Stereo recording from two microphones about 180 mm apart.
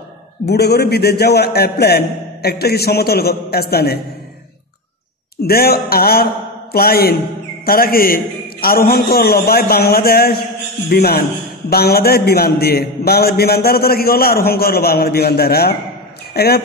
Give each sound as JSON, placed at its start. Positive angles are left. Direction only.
{"t": 0.5, "sound": "a man's voice", "side_deg": 65}
{"t": 5.4, "sound": "a man's voice", "side_deg": 60}